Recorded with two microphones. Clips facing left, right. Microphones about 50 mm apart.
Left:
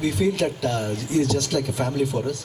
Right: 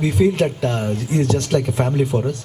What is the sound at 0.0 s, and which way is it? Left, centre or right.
A man's voice, right.